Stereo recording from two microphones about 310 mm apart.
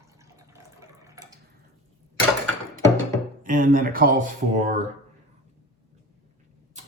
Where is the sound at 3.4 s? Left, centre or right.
Right.